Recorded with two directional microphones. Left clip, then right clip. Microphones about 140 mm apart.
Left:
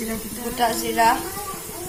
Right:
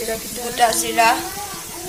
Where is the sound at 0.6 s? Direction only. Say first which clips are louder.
Right 4 dB; 10° right (ahead or behind).